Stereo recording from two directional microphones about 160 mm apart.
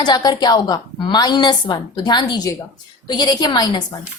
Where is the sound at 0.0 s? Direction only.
25° left (ahead or behind).